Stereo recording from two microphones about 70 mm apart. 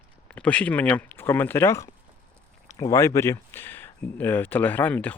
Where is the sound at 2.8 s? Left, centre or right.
Left.